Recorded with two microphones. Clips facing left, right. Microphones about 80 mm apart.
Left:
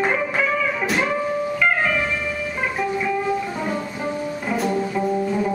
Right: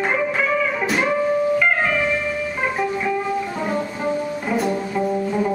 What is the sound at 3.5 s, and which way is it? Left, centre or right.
Music, centre.